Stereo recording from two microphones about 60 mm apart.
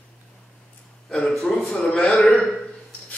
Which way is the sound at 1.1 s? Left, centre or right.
Centre.